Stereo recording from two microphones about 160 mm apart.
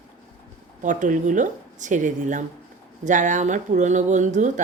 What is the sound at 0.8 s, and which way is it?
Speech, 50° right (ahead or behind).